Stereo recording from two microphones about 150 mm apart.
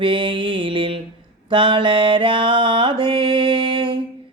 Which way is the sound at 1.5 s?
35° right (ahead or behind).